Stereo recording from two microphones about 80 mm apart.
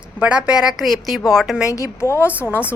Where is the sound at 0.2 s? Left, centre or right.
Centre.